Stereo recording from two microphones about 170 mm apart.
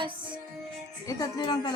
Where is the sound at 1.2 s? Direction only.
25° left (ahead or behind).